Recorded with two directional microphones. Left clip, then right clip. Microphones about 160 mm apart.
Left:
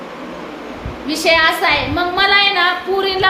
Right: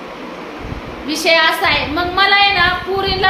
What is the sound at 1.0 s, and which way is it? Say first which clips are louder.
A woman's voice: even; 10° left (ahead or behind).